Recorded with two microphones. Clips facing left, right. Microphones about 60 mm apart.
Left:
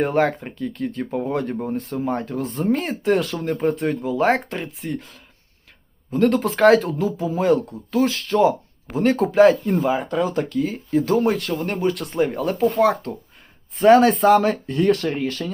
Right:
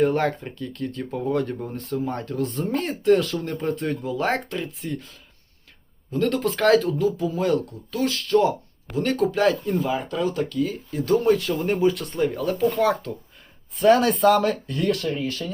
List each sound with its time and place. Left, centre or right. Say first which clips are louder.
0.0 s speech: left 2 dB; centre
1.7 s speech: left 4 dB; centre
6.8 s speech: even; left
11.6 s speech: right 1 dB; centre
12.4 s speech: left 4 dB; centre
13.7 s speech: left 4 dB; left
15.0 s speech: left 3 dB; left
15.3 s speech: left 2 dB; left